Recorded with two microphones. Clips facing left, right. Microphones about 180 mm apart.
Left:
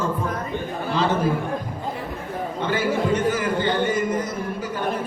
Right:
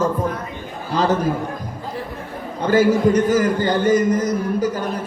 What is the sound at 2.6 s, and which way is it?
A man's voice, 40° right (ahead or behind).